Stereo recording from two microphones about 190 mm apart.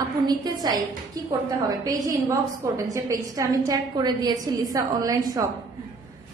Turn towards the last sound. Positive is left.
turn(degrees=-20)  # may be behind; listen again after turning